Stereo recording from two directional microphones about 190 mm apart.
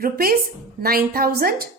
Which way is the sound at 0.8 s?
50° right (ahead or behind).